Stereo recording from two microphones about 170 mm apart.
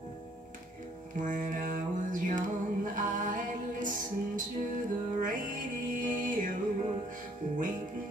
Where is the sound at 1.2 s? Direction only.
50° right (ahead or behind).